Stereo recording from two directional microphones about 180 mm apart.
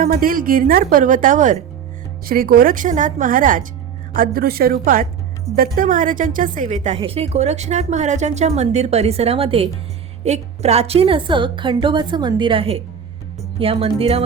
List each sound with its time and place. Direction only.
0.0 s a woman's voice: 55° right (ahead or behind); by 14.3 s 35° right (ahead or behind)